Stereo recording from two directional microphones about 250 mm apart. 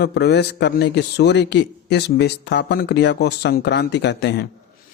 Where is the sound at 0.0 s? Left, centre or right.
Left.